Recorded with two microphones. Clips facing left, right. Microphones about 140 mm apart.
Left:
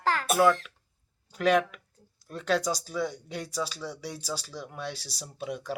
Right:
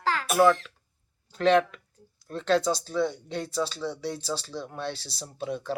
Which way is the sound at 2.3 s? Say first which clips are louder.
Right 3 dB; 10° left (ahead or behind).